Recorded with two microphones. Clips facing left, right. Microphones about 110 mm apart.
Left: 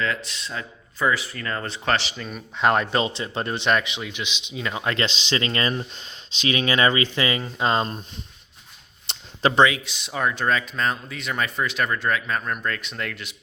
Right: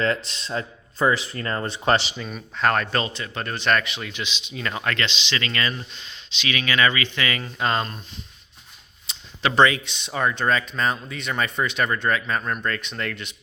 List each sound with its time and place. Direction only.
0.0 s speech: 30° right (ahead or behind)
1.6 s speech: 20° right (ahead or behind)
2.1 s speech: centre (ahead or behind)
2.6 s a man's voice: 20° left (ahead or behind)
4.9 s a man's voice: 35° left (ahead or behind)
9.1 s a sound: 65° left (ahead or behind)
9.6 s speech: 5° left (ahead or behind)